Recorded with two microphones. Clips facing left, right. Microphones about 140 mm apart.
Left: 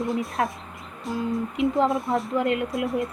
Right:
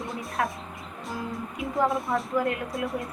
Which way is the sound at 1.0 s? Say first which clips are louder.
Left 7 dB; centre (ahead or behind).